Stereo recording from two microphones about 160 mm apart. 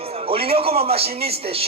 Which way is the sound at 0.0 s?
35° right (ahead or behind).